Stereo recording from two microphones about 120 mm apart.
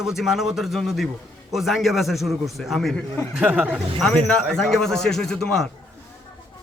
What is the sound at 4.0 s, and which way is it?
A man's voice, 5° left (ahead or behind).